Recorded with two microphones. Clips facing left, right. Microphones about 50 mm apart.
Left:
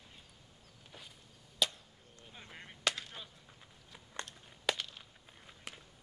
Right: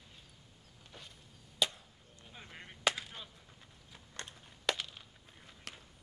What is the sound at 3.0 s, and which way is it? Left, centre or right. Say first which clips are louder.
Chop: right 1 dB; centre.